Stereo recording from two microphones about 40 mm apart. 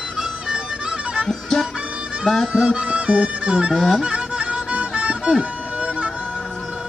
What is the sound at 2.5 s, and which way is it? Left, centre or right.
Music, centre.